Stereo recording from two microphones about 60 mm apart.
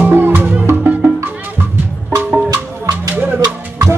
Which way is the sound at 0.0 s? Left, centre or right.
Right.